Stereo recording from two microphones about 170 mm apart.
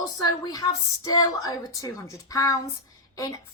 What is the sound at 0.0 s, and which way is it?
A woman's voice, 20° left (ahead or behind).